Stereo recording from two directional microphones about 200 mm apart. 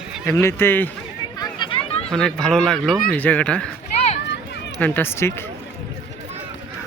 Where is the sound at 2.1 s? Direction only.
5° left (ahead or behind).